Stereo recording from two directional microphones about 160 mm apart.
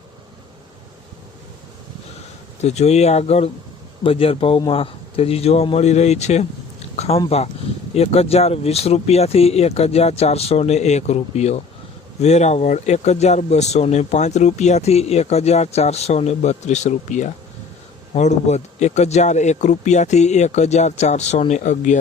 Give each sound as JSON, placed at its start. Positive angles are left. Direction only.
{"t": 2.6, "sound": "speech", "side_deg": 45}